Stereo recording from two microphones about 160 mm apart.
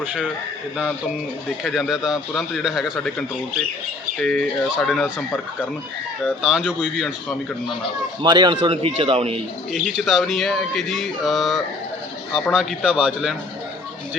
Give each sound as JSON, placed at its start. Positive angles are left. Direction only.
{"t": 0.0, "sound": "speech", "side_deg": -10}
{"t": 1.5, "sound": "speech", "side_deg": 0}
{"t": 6.2, "sound": "speech", "side_deg": -5}
{"t": 8.2, "sound": "a man's voice", "side_deg": -25}
{"t": 9.7, "sound": "speech", "side_deg": 0}